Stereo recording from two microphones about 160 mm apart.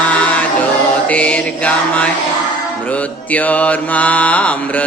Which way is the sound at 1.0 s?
10° left (ahead or behind).